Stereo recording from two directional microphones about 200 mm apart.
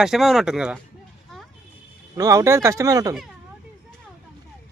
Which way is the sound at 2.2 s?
15° right (ahead or behind).